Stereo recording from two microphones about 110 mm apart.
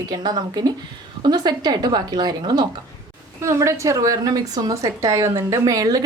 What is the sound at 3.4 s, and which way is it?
Speech, 25° right (ahead or behind).